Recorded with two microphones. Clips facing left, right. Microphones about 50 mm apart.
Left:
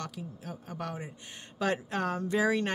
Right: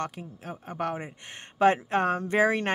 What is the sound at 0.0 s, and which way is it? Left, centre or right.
Speech, right.